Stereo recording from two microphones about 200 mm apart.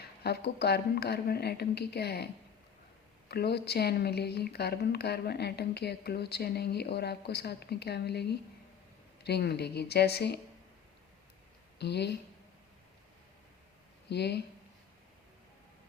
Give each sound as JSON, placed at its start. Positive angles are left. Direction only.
{"t": 0.2, "sound": "speech", "side_deg": 55}
{"t": 11.8, "sound": "speech", "side_deg": 55}
{"t": 14.1, "sound": "speech", "side_deg": 55}